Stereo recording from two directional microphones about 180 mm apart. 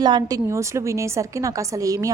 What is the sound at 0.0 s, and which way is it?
A woman's voice, 25° right (ahead or behind).